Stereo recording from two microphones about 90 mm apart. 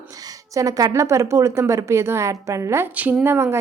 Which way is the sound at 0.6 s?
40° right (ahead or behind).